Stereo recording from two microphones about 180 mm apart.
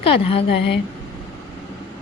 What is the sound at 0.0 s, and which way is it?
Speech, 30° left (ahead or behind).